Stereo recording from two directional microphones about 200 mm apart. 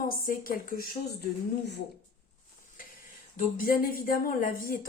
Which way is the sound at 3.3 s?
45° left (ahead or behind).